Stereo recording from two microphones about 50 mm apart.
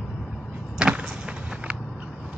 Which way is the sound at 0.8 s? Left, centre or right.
Centre.